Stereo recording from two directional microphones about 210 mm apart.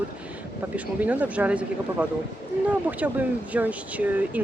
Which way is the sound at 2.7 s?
5° right (ahead or behind).